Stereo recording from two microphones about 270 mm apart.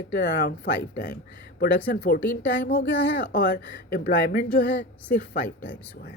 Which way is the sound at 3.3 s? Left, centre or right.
Left.